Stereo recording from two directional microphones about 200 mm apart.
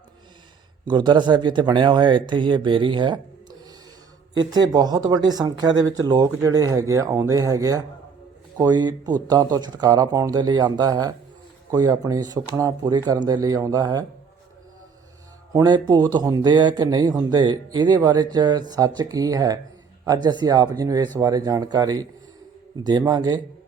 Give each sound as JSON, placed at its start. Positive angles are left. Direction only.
{"t": 0.9, "sound": "speech", "side_deg": -20}
{"t": 4.4, "sound": "speech", "side_deg": -20}
{"t": 15.5, "sound": "speech", "side_deg": -20}